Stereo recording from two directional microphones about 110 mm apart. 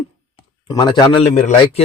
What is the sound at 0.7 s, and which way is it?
Speech, 40° left (ahead or behind).